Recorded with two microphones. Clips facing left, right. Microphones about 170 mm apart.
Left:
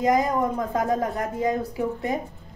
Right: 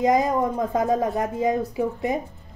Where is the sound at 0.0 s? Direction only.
20° right (ahead or behind).